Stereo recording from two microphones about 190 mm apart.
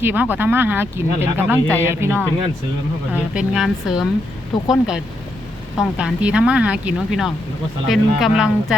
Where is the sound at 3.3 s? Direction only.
Centre (ahead or behind).